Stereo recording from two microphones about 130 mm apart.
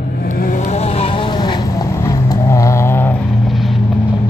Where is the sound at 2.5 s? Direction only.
25° left (ahead or behind).